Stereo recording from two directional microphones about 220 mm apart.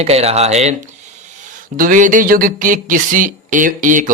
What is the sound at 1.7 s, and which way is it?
Speech, 40° right (ahead or behind).